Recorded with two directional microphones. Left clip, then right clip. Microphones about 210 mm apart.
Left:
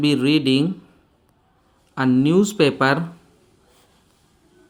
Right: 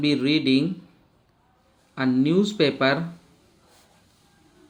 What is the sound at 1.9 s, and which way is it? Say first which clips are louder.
Speech: left 4 dB; 50° left (ahead or behind).